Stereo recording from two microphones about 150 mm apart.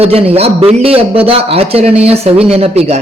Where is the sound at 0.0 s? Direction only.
40° right (ahead or behind).